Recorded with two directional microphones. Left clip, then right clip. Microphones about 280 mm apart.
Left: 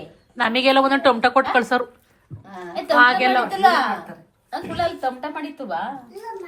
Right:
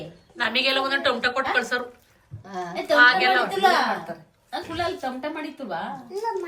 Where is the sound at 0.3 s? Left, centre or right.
Centre.